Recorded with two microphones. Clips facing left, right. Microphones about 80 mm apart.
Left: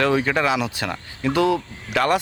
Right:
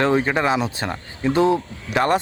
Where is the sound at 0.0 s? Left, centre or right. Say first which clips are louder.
Right 1 dB; right.